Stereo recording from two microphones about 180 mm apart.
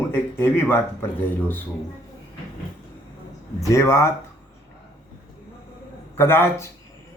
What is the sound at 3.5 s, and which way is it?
Speech, 15° left (ahead or behind).